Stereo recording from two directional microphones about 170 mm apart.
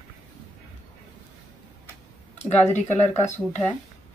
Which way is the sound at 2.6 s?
40° left (ahead or behind).